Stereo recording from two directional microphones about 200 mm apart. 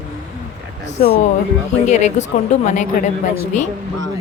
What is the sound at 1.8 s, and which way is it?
Speech, 35° left (ahead or behind).